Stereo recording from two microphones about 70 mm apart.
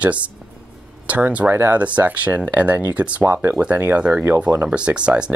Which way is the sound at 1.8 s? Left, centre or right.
Right.